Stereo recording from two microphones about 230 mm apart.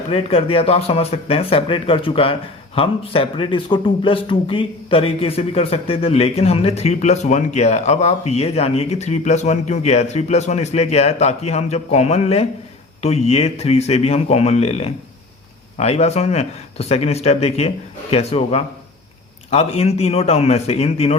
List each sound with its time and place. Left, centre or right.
0.1 s speech: left